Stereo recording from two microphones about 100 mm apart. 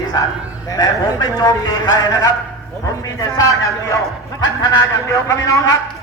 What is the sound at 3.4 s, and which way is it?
Speech, 35° left (ahead or behind).